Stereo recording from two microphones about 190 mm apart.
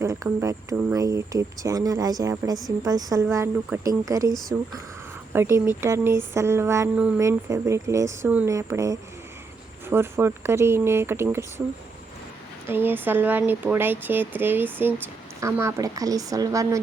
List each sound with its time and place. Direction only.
0.0 s a woman's voice: 15° right (ahead or behind)
5.3 s speech: 15° right (ahead or behind)
12.6 s speech: 10° right (ahead or behind)